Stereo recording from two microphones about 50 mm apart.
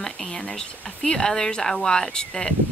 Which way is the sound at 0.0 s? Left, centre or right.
Centre.